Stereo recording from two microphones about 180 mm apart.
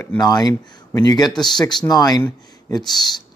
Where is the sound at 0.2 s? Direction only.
20° left (ahead or behind).